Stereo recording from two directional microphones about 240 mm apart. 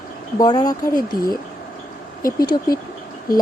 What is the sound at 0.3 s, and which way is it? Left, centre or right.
Speech, centre.